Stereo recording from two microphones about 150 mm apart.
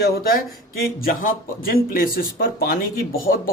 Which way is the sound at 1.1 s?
70° left (ahead or behind).